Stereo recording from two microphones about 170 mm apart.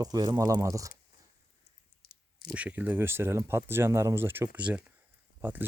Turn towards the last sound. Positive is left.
turn(degrees=-10)  # may be behind; listen again after turning